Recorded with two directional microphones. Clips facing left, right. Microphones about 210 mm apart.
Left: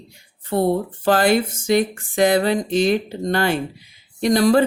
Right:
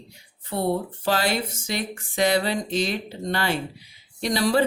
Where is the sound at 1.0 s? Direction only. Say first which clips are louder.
Left 8 dB; 50° left (ahead or behind).